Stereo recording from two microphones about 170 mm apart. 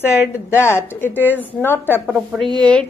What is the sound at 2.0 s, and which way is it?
Speech, centre (ahead or behind).